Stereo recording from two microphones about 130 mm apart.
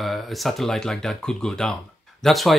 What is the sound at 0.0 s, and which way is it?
Speech, centre (ahead or behind).